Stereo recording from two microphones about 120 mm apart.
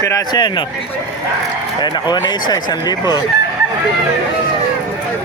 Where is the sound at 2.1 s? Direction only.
35° left (ahead or behind).